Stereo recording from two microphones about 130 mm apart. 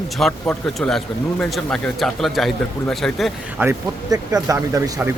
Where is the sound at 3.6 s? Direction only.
15° right (ahead or behind).